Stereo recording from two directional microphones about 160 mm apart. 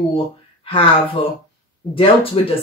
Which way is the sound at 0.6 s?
35° left (ahead or behind).